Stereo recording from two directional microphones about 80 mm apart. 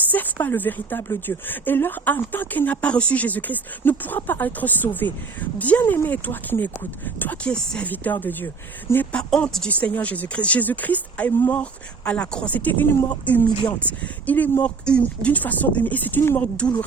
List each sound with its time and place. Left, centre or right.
0.0 s speech: left
7.5 s speech: centre
7.9 s speech: left
9.1 s speech: centre
9.6 s speech: centre
16.6 s speech: centre